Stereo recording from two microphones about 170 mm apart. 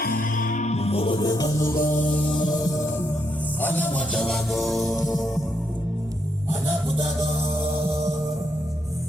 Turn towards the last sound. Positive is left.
turn(degrees=-20)  # may be behind; listen again after turning